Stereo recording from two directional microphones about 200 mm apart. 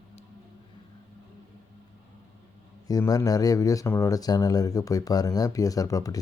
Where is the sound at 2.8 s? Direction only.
20° left (ahead or behind).